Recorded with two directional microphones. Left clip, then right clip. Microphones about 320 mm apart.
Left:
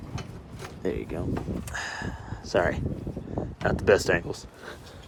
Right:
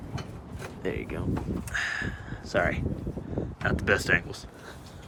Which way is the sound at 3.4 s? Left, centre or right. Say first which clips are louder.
Left 1 dB; centre.